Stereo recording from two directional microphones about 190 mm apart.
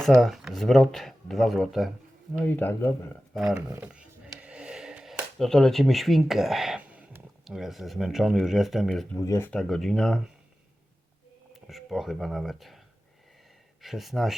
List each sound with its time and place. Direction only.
0.0 s speech: centre (ahead or behind)
2.4 s speech: 10° left (ahead or behind)
3.3 s speech: 5° right (ahead or behind)
9.2 s speech: 15° left (ahead or behind)
9.5 s speech: centre (ahead or behind)
11.5 s speech: centre (ahead or behind)
13.8 s speech: centre (ahead or behind)